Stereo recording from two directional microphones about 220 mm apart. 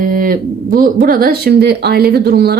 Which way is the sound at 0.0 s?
40° right (ahead or behind).